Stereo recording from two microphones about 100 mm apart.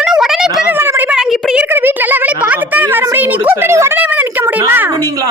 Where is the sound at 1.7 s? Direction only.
20° right (ahead or behind).